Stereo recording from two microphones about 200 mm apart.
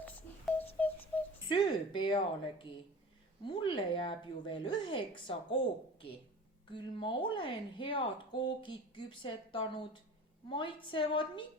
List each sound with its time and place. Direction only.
0.0 s a sound: 10° left (ahead or behind)
1.5 s speech: 25° left (ahead or behind)
6.7 s speech: 25° left (ahead or behind)